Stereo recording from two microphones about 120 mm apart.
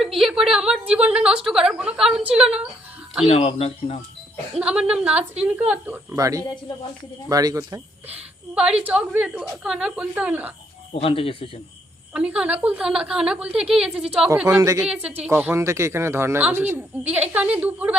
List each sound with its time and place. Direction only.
0.0 s a woman's voice: centre (ahead or behind)
3.2 s speech: 60° left (ahead or behind)
4.6 s a woman's voice: 10° right (ahead or behind); by 7.8 s 30° right (ahead or behind)
8.1 s a woman's voice: 10° right (ahead or behind)
10.9 s speech: 50° left (ahead or behind)
12.1 s a woman's voice: 10° right (ahead or behind)
14.4 s a woman's voice: 25° right (ahead or behind)
14.9 s a woman's voice: 15° right (ahead or behind)